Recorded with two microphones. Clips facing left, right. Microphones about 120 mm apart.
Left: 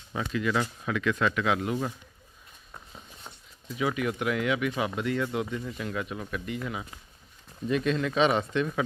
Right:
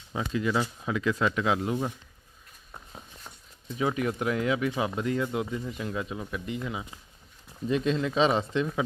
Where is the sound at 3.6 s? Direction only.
30° right (ahead or behind).